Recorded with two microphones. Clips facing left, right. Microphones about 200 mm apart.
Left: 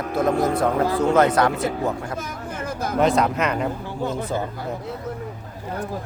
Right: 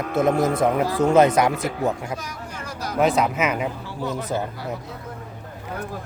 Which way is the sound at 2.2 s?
50° left (ahead or behind).